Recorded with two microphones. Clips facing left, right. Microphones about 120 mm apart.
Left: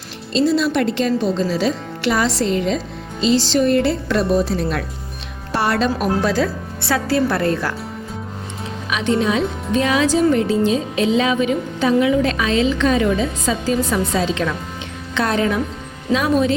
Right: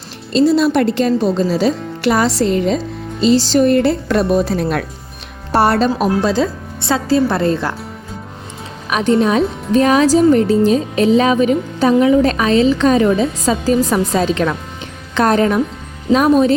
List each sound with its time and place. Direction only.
0.3 s speech: 45° right (ahead or behind)
4.4 s speech: 55° right (ahead or behind)
5.5 s a woman's voice: 40° right (ahead or behind)
6.2 s a woman's voice: 25° right (ahead or behind)
8.9 s a woman's voice: 45° right (ahead or behind)